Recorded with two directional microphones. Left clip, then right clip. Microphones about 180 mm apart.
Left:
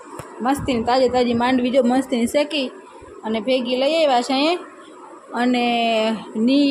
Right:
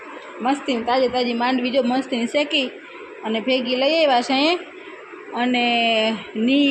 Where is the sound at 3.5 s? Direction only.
50° left (ahead or behind).